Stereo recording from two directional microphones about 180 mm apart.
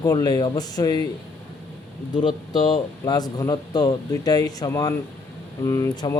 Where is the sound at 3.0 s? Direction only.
20° left (ahead or behind).